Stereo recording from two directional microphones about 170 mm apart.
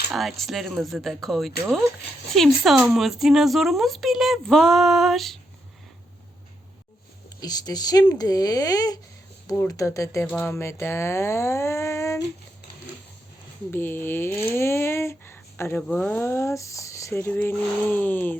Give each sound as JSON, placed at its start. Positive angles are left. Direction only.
{"t": 0.1, "sound": "speech", "side_deg": 0}
{"t": 7.4, "sound": "speech", "side_deg": 25}
{"t": 13.7, "sound": "speech", "side_deg": 10}